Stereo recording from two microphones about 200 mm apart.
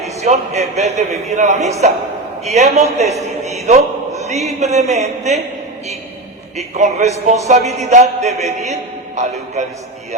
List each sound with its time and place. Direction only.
0.0 s a sound: 35° right (ahead or behind)
0.8 s a man's voice: 35° right (ahead or behind)
3.4 s a sound: 35° right (ahead or behind)
4.4 s speech: centre (ahead or behind)
4.7 s a man's voice: 35° right (ahead or behind)
6.6 s a man's voice: 35° right (ahead or behind)